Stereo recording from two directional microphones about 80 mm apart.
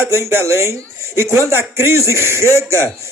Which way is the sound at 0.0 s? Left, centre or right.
Right.